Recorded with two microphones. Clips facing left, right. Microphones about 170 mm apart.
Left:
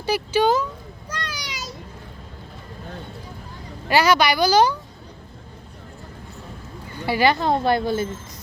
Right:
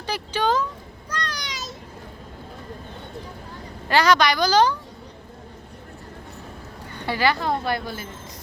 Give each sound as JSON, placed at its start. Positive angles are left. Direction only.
{"t": 0.0, "sound": "speech", "side_deg": 10}
{"t": 1.1, "sound": "a sound", "side_deg": 5}
{"t": 3.8, "sound": "a woman's voice", "side_deg": 10}
{"t": 7.0, "sound": "speech", "side_deg": 10}
{"t": 7.3, "sound": "speech", "side_deg": 25}